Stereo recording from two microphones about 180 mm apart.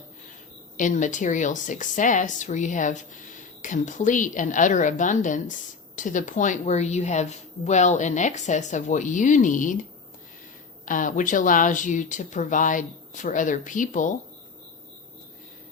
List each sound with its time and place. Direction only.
0.8 s a woman's voice: 45° left (ahead or behind)
10.8 s a woman's voice: 45° left (ahead or behind)